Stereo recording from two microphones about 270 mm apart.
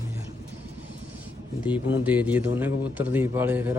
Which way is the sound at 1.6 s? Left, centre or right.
Centre.